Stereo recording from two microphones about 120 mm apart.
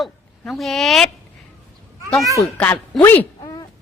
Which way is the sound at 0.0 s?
Centre (ahead or behind).